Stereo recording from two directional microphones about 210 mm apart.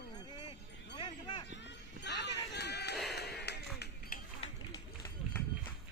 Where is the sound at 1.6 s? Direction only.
55° left (ahead or behind).